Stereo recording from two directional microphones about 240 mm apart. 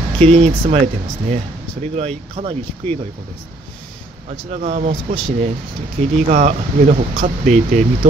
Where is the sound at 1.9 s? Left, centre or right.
Right.